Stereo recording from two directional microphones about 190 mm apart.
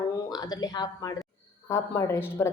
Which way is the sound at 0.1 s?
20° left (ahead or behind).